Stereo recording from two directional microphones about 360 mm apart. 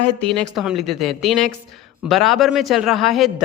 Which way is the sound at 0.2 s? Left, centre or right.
Centre.